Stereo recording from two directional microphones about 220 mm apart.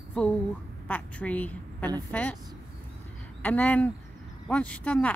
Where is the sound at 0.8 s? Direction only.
5° left (ahead or behind).